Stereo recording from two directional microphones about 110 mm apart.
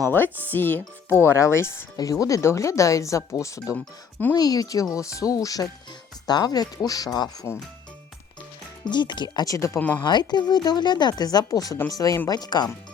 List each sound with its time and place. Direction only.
0.1 s speech: 20° left (ahead or behind); by 7.3 s 35° left (ahead or behind)
7.5 s speech: 20° left (ahead or behind)
8.8 s speech: 45° left (ahead or behind); by 9.8 s 25° left (ahead or behind)
10.0 s speech: 40° left (ahead or behind)